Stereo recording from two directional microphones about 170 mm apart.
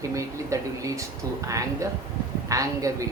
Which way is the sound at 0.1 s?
20° right (ahead or behind).